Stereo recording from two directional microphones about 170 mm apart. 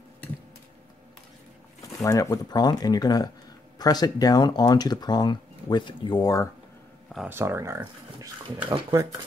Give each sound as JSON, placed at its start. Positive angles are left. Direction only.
{"t": 1.8, "sound": "speech", "side_deg": 20}
{"t": 7.2, "sound": "speech", "side_deg": -15}